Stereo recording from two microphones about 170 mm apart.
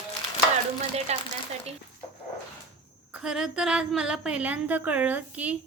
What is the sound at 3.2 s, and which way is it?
Speech, 5° right (ahead or behind).